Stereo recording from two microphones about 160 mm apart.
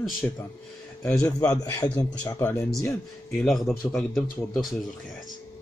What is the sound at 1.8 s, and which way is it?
Speech, 25° left (ahead or behind).